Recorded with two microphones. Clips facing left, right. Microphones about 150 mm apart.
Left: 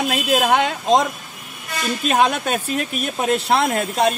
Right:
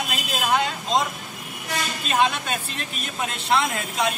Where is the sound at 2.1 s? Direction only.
55° left (ahead or behind).